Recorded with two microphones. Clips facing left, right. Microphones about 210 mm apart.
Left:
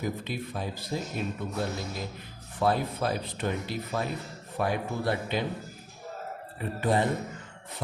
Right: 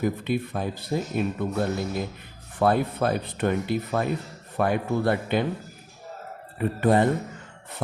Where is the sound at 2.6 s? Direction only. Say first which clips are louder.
Right 5 dB; 55° right (ahead or behind).